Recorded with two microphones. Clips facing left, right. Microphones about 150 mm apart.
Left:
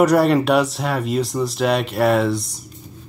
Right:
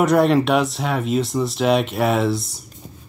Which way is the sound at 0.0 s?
Centre (ahead or behind).